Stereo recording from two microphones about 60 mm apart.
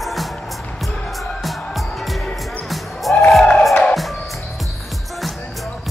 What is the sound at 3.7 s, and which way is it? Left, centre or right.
Music, left.